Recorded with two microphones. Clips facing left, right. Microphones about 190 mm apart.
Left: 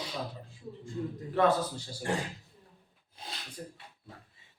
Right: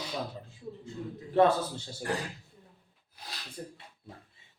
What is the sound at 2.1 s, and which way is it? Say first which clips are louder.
Speech: left 1 dB; 25° left (ahead or behind).